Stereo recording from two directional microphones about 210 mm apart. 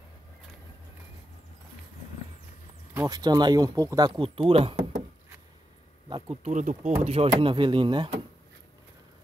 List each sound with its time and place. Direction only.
2.9 s speech: 15° right (ahead or behind)
6.0 s speech: 25° right (ahead or behind)